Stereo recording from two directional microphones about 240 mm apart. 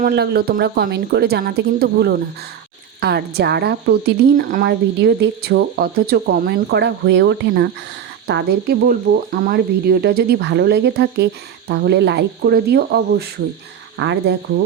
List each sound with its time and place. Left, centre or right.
0.0 s a woman's voice: right